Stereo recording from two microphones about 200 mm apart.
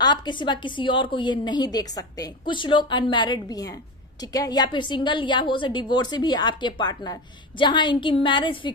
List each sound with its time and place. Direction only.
0.0 s a woman's voice: 20° left (ahead or behind)